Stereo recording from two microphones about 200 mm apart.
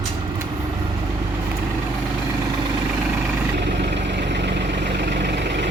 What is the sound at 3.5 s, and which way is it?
Vehicle, 60° right (ahead or behind).